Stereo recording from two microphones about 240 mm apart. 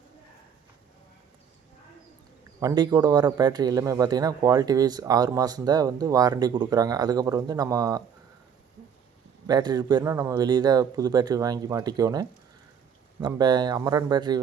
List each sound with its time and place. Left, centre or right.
2.6 s a man's voice: centre
9.5 s a man's voice: centre